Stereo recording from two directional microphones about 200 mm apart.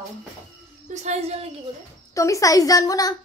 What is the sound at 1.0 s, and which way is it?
Speech, 30° right (ahead or behind).